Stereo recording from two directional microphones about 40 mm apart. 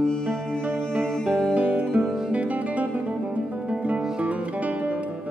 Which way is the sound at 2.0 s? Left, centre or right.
Centre.